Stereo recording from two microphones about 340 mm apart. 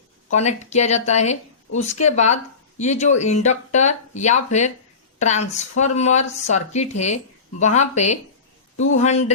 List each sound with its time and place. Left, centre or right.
0.3 s a woman's voice: centre